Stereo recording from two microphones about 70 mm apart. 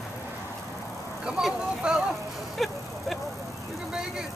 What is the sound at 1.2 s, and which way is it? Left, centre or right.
Speech, centre.